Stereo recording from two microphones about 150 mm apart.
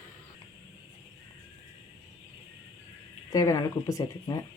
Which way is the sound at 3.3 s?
25° left (ahead or behind).